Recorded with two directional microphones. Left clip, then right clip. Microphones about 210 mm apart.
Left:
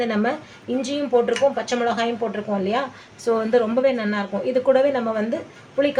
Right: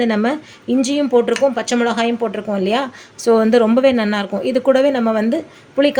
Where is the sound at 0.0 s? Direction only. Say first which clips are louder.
Right 5 dB; 45° right (ahead or behind).